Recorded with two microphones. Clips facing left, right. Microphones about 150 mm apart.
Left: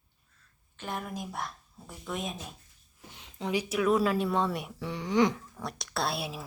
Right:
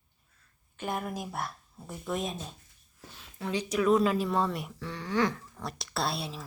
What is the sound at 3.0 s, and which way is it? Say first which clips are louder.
A woman's voice: left 2 dB; 20° left (ahead or behind).